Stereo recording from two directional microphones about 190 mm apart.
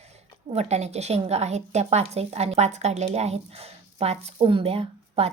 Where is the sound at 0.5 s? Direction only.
35° right (ahead or behind).